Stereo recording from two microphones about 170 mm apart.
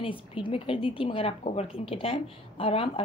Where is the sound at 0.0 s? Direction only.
30° left (ahead or behind).